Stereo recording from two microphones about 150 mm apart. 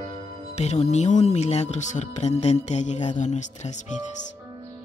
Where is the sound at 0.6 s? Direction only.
45° left (ahead or behind).